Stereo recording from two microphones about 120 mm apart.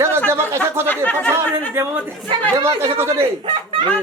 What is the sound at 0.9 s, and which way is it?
Speech, 15° left (ahead or behind).